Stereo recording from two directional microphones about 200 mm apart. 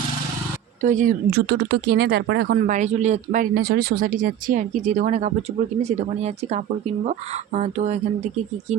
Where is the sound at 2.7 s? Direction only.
35° right (ahead or behind).